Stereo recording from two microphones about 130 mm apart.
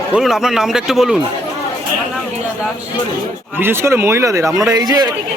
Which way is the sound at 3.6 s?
20° right (ahead or behind).